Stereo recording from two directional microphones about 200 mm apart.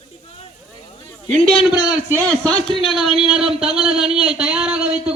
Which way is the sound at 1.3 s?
25° left (ahead or behind).